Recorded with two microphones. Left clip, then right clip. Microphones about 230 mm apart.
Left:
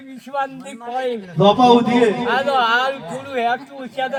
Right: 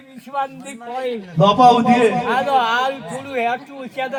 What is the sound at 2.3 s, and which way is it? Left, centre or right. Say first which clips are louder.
Speech: even; right.